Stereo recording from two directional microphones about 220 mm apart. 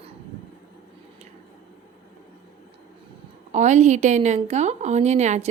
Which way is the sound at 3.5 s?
30° right (ahead or behind).